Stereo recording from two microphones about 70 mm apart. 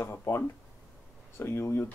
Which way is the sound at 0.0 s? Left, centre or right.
Left.